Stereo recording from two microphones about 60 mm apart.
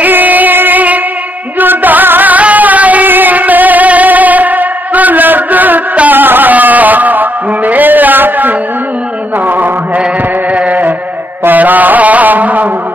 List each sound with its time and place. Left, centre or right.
0.0 s music: right
9.5 s chant: right
10.5 s music: right
11.4 s a sound: right